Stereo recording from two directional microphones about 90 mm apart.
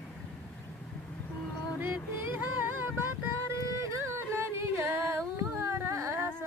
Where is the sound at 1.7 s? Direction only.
20° right (ahead or behind).